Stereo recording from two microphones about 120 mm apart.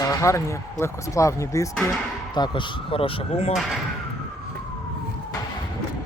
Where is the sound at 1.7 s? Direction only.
5° left (ahead or behind).